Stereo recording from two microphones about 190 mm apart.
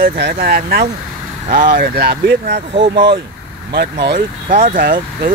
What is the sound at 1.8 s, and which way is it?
Speech, 55° right (ahead or behind).